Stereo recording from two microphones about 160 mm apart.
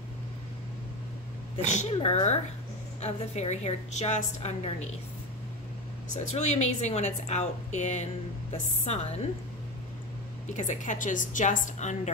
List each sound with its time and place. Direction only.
1.6 s a woman's voice: 45° left (ahead or behind)
6.1 s a woman's voice: 45° left (ahead or behind)
10.5 s a woman's voice: 50° left (ahead or behind)